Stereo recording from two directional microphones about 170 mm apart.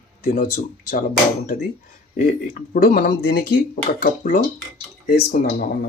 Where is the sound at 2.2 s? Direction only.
45° left (ahead or behind); by 5.7 s 65° left (ahead or behind).